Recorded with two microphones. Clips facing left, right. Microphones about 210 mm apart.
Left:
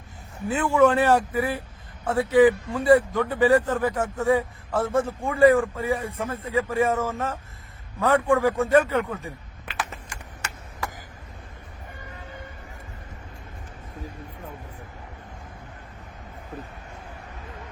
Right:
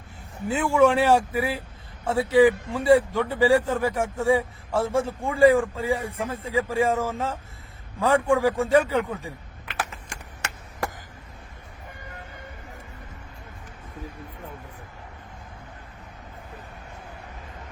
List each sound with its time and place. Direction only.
0.5 s speech: 10° right (ahead or behind)